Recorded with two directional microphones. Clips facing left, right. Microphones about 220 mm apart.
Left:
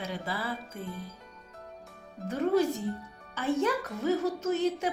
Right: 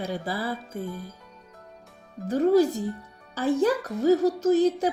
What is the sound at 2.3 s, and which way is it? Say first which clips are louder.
A woman's voice: right 6 dB; 35° right (ahead or behind).